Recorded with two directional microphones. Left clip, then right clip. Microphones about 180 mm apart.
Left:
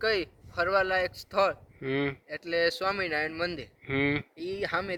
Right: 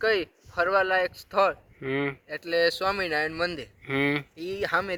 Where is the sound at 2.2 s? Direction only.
35° right (ahead or behind).